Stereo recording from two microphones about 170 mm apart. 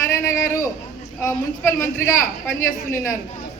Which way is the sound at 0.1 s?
15° left (ahead or behind).